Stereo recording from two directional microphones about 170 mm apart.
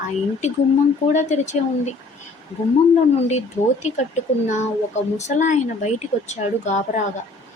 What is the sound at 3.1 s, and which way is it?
Speech, 40° left (ahead or behind).